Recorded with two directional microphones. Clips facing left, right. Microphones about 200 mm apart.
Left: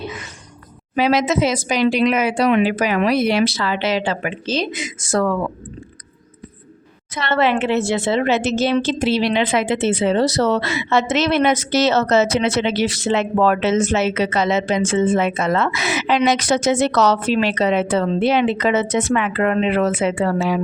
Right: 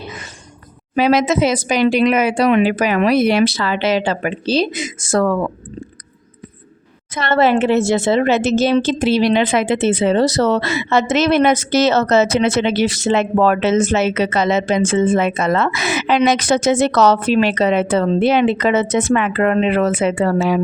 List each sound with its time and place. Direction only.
0.9 s a woman's voice: 50° right (ahead or behind)
7.1 s a woman's voice: 45° right (ahead or behind)